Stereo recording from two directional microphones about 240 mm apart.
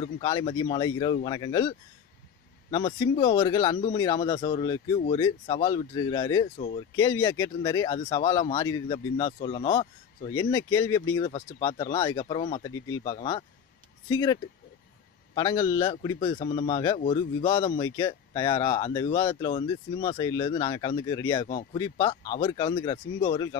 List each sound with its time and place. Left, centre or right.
0.0 s speech: centre
15.3 s speech: centre